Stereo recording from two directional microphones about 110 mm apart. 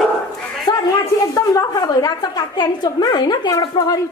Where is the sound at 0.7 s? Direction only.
45° left (ahead or behind).